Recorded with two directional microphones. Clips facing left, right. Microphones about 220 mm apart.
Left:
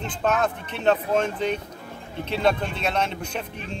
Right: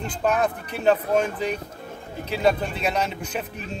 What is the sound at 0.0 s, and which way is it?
A man's voice, 10° right (ahead or behind).